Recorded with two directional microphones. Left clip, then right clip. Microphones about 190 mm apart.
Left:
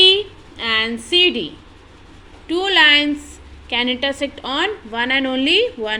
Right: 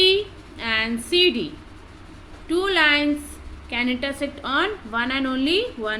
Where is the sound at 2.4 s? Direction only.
10° left (ahead or behind).